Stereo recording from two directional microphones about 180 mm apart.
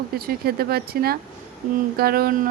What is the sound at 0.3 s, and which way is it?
Speech, 60° right (ahead or behind).